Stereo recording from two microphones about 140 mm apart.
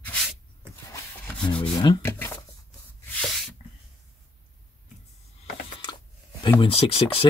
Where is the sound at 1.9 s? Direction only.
30° left (ahead or behind).